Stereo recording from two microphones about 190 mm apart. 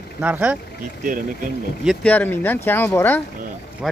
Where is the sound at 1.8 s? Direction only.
10° left (ahead or behind).